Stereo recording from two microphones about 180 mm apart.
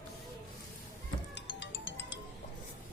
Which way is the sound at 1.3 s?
85° left.